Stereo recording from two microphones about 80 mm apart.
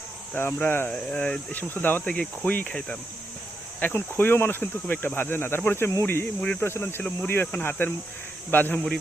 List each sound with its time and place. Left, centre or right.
0.3 s speech: left
0.9 s speech: centre
2.0 s cricket: centre
3.8 s speech: left
6.4 s cricket: centre
6.7 s speech: left